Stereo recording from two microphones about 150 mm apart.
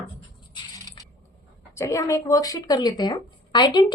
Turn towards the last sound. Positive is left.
turn(degrees=30)  # may be behind; listen again after turning